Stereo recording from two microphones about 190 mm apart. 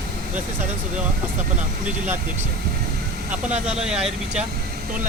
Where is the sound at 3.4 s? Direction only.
5° right (ahead or behind).